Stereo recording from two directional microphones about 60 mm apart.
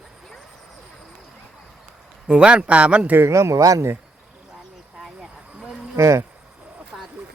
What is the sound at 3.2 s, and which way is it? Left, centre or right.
Speech, right.